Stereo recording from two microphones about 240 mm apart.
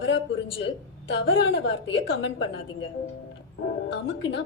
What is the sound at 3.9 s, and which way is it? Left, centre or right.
Speech, left.